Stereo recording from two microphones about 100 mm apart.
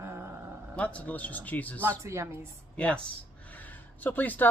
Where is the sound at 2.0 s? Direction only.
30° right (ahead or behind).